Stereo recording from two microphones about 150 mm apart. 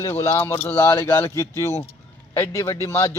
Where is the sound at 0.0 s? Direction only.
20° left (ahead or behind).